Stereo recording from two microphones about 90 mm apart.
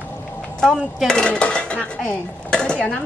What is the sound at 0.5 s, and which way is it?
Speech, 10° left (ahead or behind).